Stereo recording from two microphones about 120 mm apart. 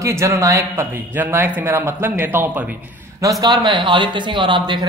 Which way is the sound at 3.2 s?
30° right (ahead or behind).